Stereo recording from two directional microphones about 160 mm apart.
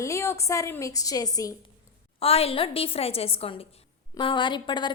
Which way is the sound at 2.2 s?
40° left (ahead or behind).